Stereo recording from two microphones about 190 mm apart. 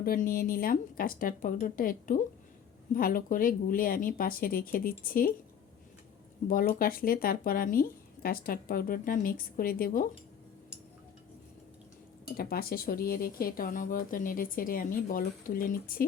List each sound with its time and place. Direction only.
0.0 s speech: 50° left (ahead or behind)
6.5 s speech: 50° left (ahead or behind)
12.4 s speech: 55° left (ahead or behind)